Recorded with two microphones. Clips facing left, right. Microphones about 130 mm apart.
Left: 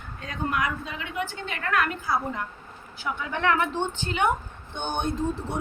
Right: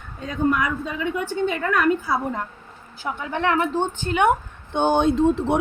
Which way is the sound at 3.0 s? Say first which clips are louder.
Right 2 dB; 35° right (ahead or behind).